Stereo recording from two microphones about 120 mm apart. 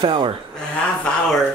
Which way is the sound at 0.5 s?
5° left (ahead or behind).